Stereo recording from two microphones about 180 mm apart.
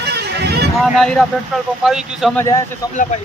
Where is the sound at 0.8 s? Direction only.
Centre (ahead or behind).